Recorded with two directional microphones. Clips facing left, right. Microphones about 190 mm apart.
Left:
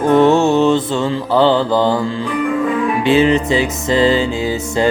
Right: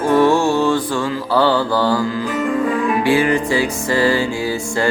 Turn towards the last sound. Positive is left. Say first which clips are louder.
# left 3 dB
turn(degrees=20)  # may be behind; listen again after turning